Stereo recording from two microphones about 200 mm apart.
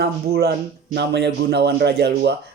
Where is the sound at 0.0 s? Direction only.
55° right (ahead or behind).